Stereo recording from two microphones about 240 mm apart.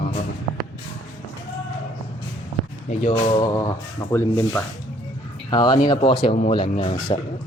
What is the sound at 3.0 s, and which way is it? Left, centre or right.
A man's voice, centre.